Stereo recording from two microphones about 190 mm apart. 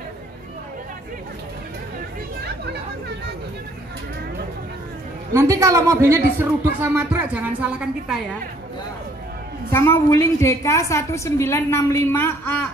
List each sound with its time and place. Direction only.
5.3 s a woman's voice: 15° right (ahead or behind)
9.7 s a woman's voice: 15° left (ahead or behind)